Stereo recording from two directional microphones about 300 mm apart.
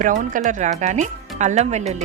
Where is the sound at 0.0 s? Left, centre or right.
Right.